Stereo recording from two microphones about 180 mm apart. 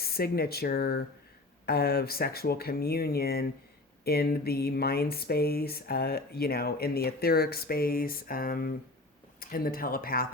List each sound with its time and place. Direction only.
0.0 s speech: 60° left (ahead or behind)